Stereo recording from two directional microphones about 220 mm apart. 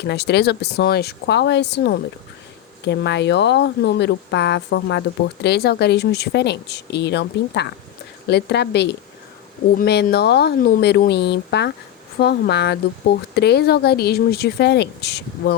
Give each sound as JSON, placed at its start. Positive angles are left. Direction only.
{"t": 0.0, "sound": "speech", "side_deg": 50}